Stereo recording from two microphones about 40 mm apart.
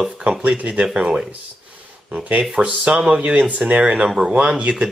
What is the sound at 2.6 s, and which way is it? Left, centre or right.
Speech, right.